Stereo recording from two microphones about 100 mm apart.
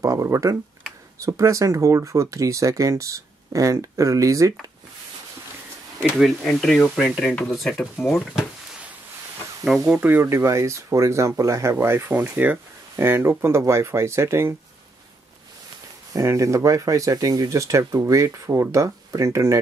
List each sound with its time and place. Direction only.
0.0 s speech: 35° right (ahead or behind)
6.4 s speech: 5° left (ahead or behind)
9.8 s speech: 20° right (ahead or behind)
16.1 s speech: 30° right (ahead or behind)